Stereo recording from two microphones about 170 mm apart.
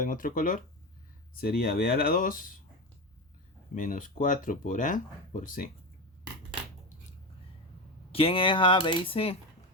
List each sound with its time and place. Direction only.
0.0 s speech: 55° left (ahead or behind)
3.8 s speech: 50° left (ahead or behind)
8.1 s speech: 35° left (ahead or behind)